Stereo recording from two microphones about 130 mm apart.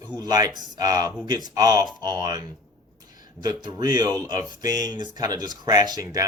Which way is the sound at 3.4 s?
35° right (ahead or behind).